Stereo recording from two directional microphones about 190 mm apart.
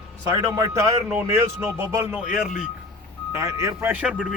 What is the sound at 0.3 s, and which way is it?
Speech, 15° right (ahead or behind).